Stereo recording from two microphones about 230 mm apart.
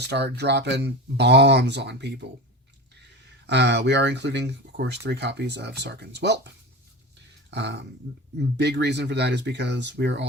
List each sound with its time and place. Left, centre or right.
0.1 s speech: right
3.4 s speech: right
7.5 s speech: right